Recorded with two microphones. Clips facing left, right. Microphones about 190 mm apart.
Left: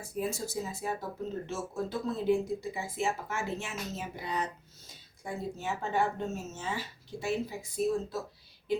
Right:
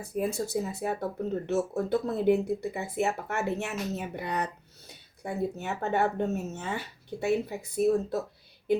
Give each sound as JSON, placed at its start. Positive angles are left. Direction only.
{"t": 0.0, "sound": "speech", "side_deg": -60}